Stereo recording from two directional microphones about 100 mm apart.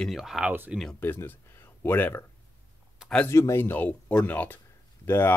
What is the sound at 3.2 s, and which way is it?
Speech, 25° left (ahead or behind).